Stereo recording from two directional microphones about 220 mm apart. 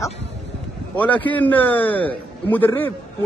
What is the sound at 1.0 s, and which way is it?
A man's voice, 5° left (ahead or behind).